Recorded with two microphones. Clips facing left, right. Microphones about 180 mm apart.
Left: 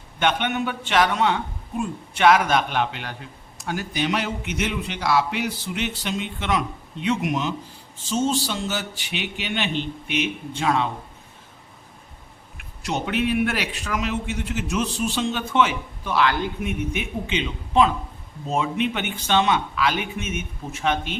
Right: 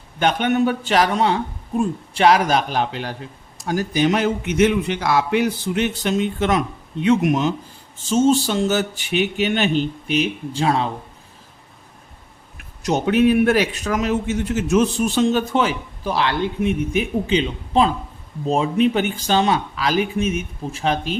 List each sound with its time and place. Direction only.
0.2 s a man's voice: 40° right (ahead or behind)
12.8 s a man's voice: 40° right (ahead or behind)